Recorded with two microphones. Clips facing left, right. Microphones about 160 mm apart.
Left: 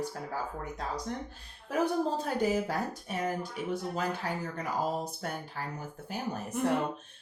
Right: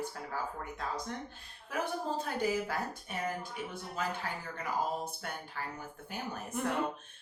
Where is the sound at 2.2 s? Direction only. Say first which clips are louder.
Left 4 dB; 40° left (ahead or behind).